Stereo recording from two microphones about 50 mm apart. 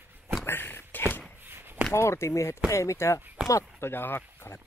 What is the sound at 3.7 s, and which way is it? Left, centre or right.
Speech, left.